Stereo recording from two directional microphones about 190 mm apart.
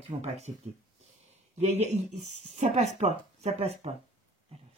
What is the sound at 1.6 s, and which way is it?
Speech, 35° right (ahead or behind).